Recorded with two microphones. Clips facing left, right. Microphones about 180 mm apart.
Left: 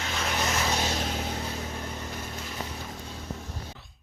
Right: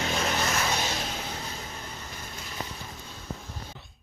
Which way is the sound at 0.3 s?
10° left (ahead or behind).